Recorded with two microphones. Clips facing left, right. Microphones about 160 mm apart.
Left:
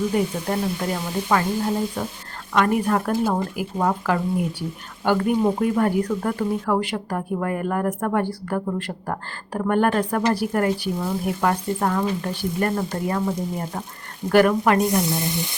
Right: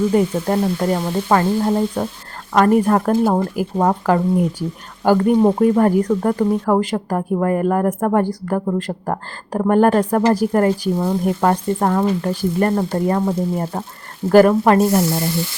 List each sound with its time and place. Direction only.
0.1 s speech: 30° right (ahead or behind)
15.0 s stir: 20° left (ahead or behind)